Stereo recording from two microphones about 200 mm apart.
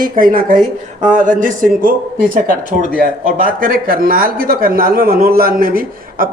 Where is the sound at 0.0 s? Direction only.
45° right (ahead or behind).